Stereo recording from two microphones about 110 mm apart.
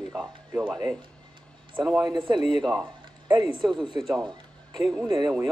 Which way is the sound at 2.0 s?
45° right (ahead or behind).